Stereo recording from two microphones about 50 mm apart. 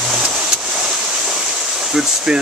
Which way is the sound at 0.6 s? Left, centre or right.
Centre.